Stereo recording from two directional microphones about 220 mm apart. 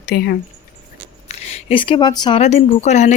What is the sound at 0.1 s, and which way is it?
Speech, 45° left (ahead or behind).